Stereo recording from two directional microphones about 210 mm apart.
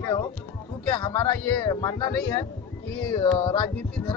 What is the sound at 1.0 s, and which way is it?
Speech, 15° left (ahead or behind).